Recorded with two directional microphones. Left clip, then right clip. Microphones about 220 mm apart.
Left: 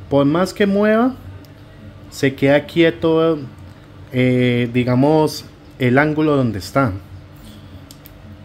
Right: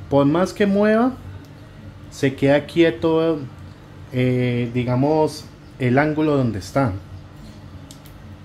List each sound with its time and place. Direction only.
0.1 s speech: 10° left (ahead or behind)
2.1 s speech: 10° left (ahead or behind)
4.7 s speech: 30° left (ahead or behind)
5.8 s speech: 15° left (ahead or behind)